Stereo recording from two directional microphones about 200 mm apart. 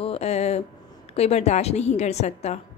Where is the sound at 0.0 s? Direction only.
30° left (ahead or behind).